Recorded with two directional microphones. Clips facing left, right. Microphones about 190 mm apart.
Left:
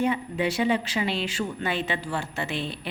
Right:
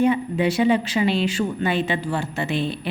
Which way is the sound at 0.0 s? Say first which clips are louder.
Right 6 dB; 15° right (ahead or behind).